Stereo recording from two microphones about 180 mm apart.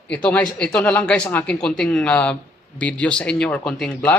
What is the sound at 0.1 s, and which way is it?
Speech, 5° left (ahead or behind).